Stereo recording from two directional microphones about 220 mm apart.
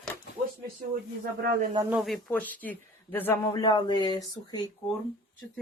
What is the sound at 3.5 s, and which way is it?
Speech, 20° left (ahead or behind).